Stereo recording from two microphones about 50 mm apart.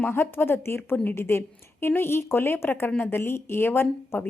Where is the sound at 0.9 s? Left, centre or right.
Left.